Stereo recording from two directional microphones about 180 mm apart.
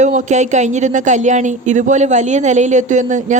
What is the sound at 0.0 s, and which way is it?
Speech, 40° right (ahead or behind).